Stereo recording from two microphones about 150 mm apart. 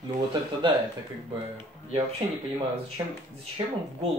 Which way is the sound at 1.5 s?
40° right (ahead or behind).